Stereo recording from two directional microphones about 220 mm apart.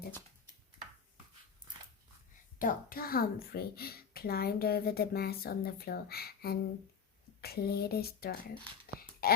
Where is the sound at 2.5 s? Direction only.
40° left (ahead or behind).